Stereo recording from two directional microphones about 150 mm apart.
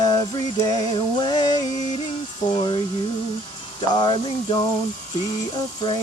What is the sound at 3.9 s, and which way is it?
Speech, 30° left (ahead or behind).